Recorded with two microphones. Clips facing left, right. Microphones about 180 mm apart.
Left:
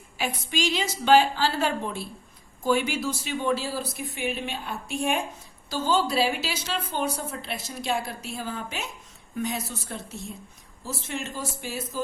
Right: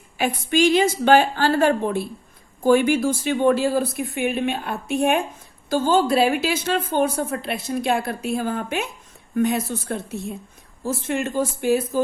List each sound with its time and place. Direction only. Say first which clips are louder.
0.2 s a woman's voice: right 9 dB; 55° right (ahead or behind)